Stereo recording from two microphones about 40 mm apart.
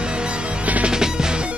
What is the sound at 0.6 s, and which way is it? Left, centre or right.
Music, right.